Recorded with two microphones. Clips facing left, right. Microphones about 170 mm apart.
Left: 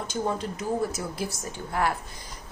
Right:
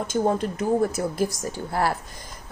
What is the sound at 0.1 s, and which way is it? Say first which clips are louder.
Speech: right 6 dB; 50° right (ahead or behind).